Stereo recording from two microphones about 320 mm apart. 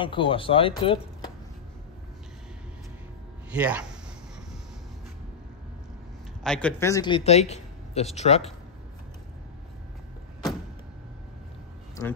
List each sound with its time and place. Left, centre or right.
0.0 s speech: centre
3.5 s speech: centre
6.4 s speech: centre